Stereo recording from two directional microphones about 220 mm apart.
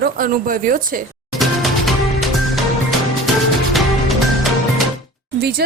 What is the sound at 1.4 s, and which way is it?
Music, centre (ahead or behind).